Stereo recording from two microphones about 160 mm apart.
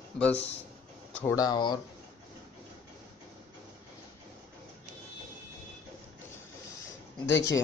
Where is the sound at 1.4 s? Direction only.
25° left (ahead or behind).